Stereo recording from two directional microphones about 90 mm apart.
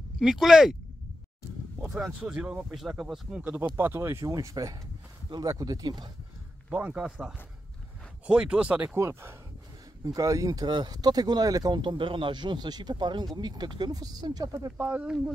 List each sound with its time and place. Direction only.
0.2 s speech: 5° right (ahead or behind)
1.9 s speech: 5° right (ahead or behind)
2.7 s speech: 5° right (ahead or behind)
3.7 s speech: 25° right (ahead or behind); by 6.0 s 50° right (ahead or behind)
6.7 s speech: 15° right (ahead or behind)
8.9 s speech: 30° right (ahead or behind); by 14.7 s 45° right (ahead or behind)
14.8 s speech: 25° right (ahead or behind)